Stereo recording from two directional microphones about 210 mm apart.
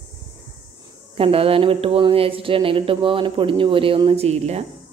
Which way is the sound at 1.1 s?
25° right (ahead or behind).